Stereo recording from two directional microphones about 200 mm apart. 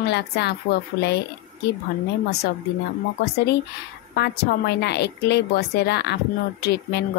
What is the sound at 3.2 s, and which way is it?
A woman's voice, 55° left (ahead or behind).